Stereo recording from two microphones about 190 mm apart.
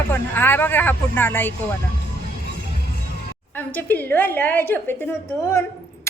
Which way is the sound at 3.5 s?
10° left (ahead or behind).